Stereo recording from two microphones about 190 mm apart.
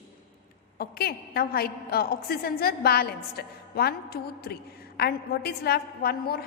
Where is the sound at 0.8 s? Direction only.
55° left (ahead or behind).